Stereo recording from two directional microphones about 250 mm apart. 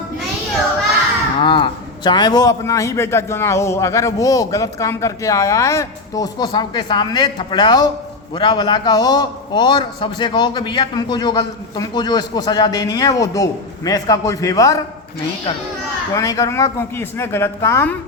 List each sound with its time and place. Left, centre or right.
1.4 s a man's voice: centre
16.1 s a man's voice: centre